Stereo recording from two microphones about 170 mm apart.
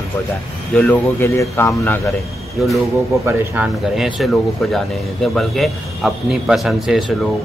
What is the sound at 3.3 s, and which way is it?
A man's voice, 5° right (ahead or behind).